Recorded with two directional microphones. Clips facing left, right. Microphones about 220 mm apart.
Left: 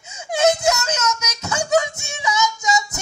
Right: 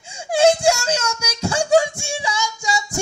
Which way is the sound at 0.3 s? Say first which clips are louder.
Right 3 dB; 30° right (ahead or behind).